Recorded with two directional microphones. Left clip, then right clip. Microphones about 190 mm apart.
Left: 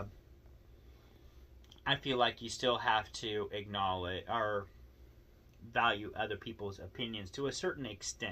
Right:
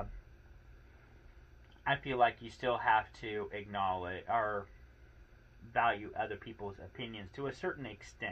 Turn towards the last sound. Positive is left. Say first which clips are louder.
# left 2 dB
turn(degrees=15)  # may be behind; listen again after turning